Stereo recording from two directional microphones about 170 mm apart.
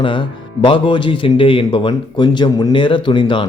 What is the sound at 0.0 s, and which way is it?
A man's voice, 30° left (ahead or behind).